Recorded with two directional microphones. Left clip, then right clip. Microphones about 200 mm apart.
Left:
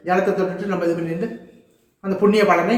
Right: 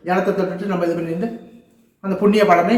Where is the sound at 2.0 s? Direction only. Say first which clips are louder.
Right 1 dB; 5° right (ahead or behind).